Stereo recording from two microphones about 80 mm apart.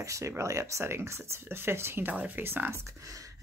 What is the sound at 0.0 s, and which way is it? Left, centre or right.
Speech, right.